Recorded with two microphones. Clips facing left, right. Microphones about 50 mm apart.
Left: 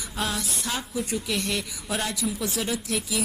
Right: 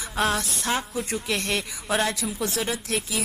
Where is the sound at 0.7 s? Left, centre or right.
Right.